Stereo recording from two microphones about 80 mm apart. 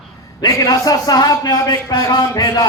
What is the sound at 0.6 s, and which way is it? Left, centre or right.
A man's voice, left.